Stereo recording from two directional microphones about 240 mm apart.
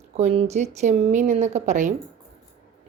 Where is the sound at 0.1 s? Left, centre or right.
Right.